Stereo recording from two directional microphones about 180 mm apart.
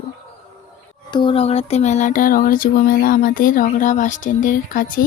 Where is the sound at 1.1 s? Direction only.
25° left (ahead or behind).